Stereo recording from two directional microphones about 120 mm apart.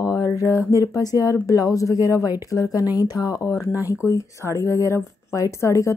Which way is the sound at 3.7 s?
15° right (ahead or behind).